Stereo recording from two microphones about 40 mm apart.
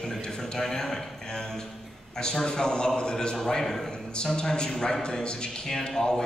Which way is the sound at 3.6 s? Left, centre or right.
Centre.